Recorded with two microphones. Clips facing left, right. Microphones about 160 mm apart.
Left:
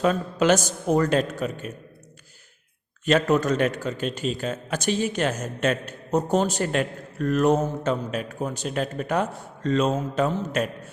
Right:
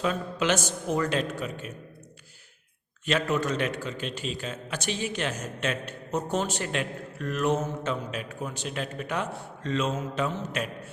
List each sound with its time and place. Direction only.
0.0 s a man's voice: 45° left (ahead or behind)
3.1 s a man's voice: 45° left (ahead or behind)